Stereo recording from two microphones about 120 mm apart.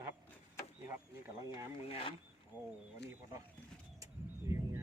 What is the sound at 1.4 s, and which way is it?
Speech, 30° right (ahead or behind).